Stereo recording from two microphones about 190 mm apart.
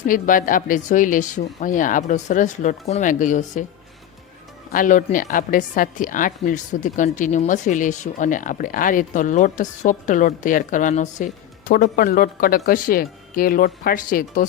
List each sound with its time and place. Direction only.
0.1 s speech: 45° left (ahead or behind)
4.7 s a woman's voice: 45° left (ahead or behind)